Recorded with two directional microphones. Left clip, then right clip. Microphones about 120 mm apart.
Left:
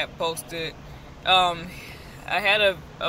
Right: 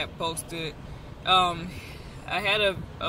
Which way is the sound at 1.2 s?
15° right (ahead or behind).